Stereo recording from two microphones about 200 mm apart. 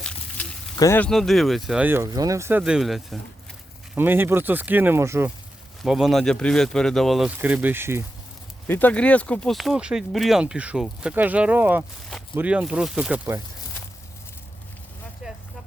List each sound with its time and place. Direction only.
0.0 s a sound: 5° left (ahead or behind)
0.8 s speech: 10° left (ahead or behind); by 5.3 s 15° right (ahead or behind)
5.8 s speech: centre (ahead or behind)
8.6 s speech: 10° left (ahead or behind); by 13.4 s 10° right (ahead or behind)